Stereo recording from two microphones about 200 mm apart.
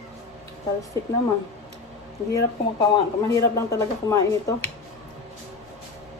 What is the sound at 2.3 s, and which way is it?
Speech, 15° left (ahead or behind).